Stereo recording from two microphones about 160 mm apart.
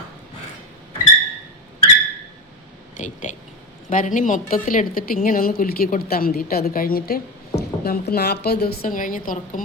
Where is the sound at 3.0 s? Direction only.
50° left (ahead or behind).